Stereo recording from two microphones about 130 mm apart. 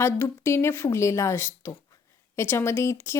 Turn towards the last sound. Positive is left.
turn(degrees=20)  # may be behind; listen again after turning